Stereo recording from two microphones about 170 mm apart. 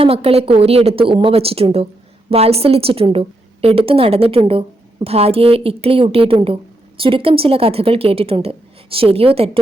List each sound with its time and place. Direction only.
0.0 s a woman's voice: 35° right (ahead or behind)